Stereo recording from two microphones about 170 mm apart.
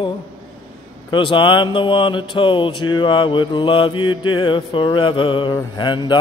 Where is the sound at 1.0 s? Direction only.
30° left (ahead or behind).